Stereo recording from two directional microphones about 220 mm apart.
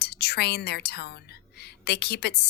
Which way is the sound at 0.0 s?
45° left (ahead or behind).